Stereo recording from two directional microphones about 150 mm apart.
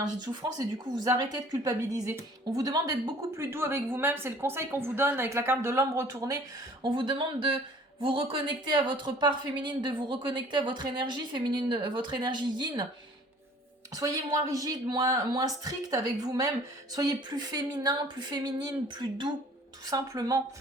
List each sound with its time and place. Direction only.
0.0 s a woman's voice: 25° right (ahead or behind)
6.8 s a woman's voice: 30° right (ahead or behind)
13.9 s a woman's voice: 25° right (ahead or behind)